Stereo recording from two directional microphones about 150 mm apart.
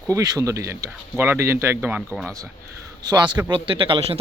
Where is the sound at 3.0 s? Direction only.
30° right (ahead or behind).